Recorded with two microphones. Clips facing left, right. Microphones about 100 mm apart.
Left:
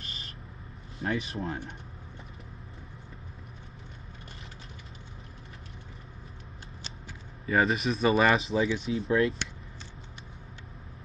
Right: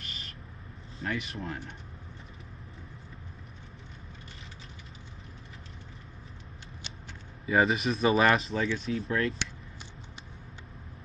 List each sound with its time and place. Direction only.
0.0 s vehicle: 30° left (ahead or behind)
1.0 s speech: 30° left (ahead or behind)
7.4 s speech: centre (ahead or behind)